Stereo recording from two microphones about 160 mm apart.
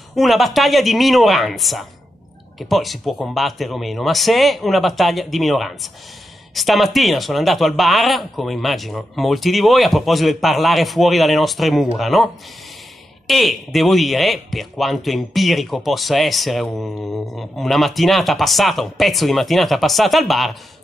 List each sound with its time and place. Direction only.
0.1 s speech: centre (ahead or behind)
13.3 s speech: centre (ahead or behind)